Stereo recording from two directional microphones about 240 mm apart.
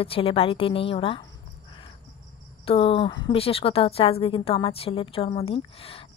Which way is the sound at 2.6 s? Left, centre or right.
Left.